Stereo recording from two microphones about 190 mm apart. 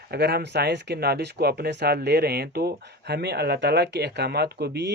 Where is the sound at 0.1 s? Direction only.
55° right (ahead or behind).